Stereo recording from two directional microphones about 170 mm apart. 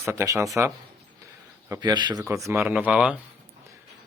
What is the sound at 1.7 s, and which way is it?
Speech, 25° right (ahead or behind).